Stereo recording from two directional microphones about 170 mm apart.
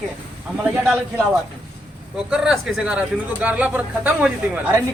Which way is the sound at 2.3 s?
5° right (ahead or behind).